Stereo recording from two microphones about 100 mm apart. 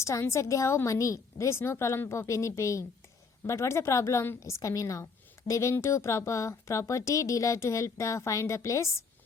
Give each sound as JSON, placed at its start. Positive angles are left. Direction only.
{"t": 0.0, "sound": "a woman's voice", "side_deg": 30}